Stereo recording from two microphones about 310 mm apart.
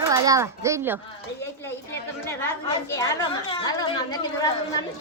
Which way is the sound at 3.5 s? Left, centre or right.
Centre.